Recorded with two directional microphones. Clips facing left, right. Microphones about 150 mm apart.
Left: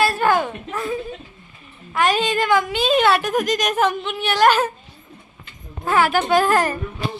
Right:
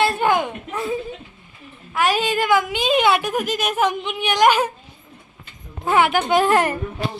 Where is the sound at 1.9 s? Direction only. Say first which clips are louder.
Left 1 dB; 10° right (ahead or behind).